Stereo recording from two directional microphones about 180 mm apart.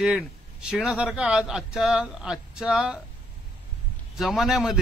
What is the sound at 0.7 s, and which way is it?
Speech, 5° right (ahead or behind).